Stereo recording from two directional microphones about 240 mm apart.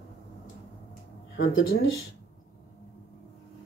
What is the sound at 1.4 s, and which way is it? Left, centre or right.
Speech, left.